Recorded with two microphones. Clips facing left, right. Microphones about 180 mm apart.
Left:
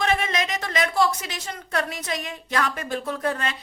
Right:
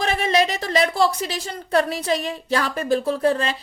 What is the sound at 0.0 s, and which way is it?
A woman's voice, 35° right (ahead or behind).